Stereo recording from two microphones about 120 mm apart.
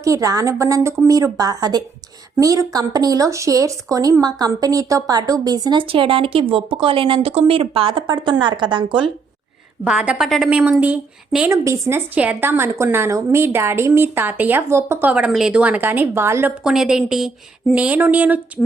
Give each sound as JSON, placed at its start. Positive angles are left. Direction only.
{"t": 0.0, "sound": "a woman's voice", "side_deg": -25}
{"t": 5.9, "sound": "speech", "side_deg": -50}
{"t": 9.8, "sound": "a woman's voice", "side_deg": -10}
{"t": 10.6, "sound": "speech", "side_deg": -15}
{"t": 11.4, "sound": "a woman's voice", "side_deg": -25}
{"t": 16.6, "sound": "speech", "side_deg": -5}